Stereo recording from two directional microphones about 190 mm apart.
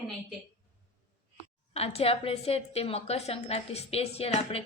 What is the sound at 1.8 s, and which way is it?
A woman's voice, 30° left (ahead or behind).